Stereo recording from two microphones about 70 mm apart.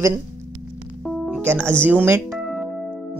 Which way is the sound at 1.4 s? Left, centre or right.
Right.